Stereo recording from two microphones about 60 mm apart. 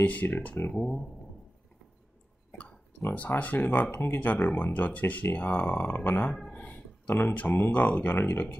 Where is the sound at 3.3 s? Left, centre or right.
Left.